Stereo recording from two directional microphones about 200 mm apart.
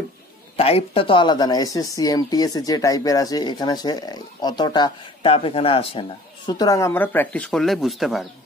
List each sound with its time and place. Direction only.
0.6 s speech: 30° left (ahead or behind); by 8.3 s centre (ahead or behind)